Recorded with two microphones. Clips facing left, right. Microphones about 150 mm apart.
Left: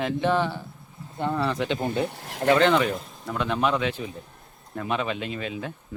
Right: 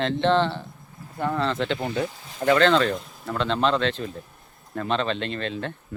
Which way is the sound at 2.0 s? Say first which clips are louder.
Left 1 dB; 75° left (ahead or behind).